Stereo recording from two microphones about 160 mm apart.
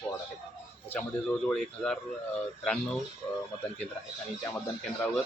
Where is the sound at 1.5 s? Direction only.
5° left (ahead or behind).